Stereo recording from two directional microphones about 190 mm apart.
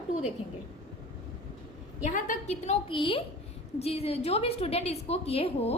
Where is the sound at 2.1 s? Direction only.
45° left (ahead or behind).